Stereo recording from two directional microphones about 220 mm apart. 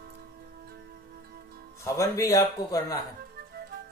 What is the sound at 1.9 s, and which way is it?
Speech, 15° left (ahead or behind).